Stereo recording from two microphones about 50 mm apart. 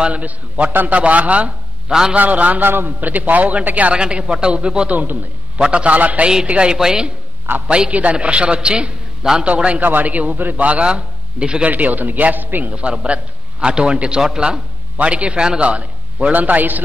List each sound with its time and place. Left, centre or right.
0.0 s a man's voice: right
1.9 s a man's voice: centre
2.1 s a man's voice: right
2.6 s a man's voice: right
4.0 s a man's voice: centre
4.9 s a man's voice: right
5.6 s a man's voice: right
7.4 s a man's voice: right
7.7 s a man's voice: right
9.8 s a man's voice: right; by 11.7 s centre
11.7 s a man's voice: right
12.7 s a man's voice: right
15.0 s a man's voice: right